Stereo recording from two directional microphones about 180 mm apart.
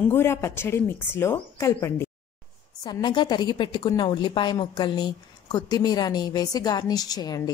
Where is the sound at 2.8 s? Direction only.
25° left (ahead or behind).